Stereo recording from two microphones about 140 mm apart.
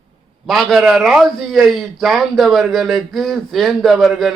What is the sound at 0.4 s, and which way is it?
A man's voice, centre (ahead or behind).